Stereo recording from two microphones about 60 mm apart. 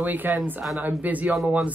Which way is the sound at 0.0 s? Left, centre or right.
Right.